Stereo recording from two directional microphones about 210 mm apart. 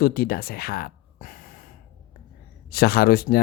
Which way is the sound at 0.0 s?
45° left (ahead or behind).